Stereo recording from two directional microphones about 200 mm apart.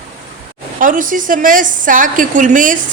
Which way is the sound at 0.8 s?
40° right (ahead or behind).